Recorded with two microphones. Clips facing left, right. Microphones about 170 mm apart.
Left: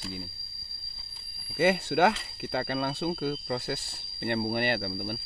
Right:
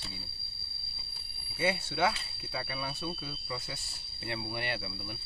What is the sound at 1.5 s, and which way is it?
Speech, 65° left (ahead or behind).